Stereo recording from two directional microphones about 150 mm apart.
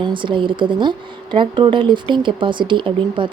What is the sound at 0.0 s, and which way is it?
Speech, 35° right (ahead or behind).